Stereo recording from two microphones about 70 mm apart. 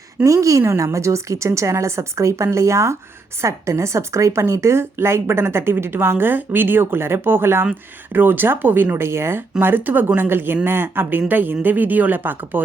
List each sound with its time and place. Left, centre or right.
0.3 s a woman's voice: right